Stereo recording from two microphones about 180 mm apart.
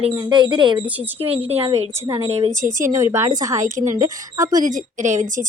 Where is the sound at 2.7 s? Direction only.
45° right (ahead or behind).